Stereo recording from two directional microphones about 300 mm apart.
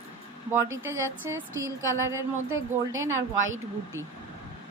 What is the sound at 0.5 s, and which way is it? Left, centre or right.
Speech, centre.